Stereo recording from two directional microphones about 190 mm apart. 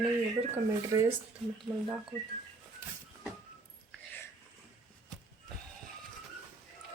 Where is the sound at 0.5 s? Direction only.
15° right (ahead or behind).